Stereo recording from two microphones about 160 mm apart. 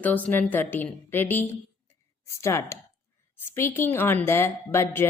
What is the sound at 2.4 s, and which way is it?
A woman's voice, 15° left (ahead or behind).